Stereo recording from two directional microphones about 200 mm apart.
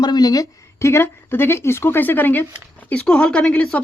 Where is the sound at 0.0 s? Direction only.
20° left (ahead or behind).